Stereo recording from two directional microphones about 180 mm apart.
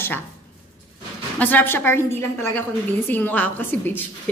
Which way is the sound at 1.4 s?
10° left (ahead or behind).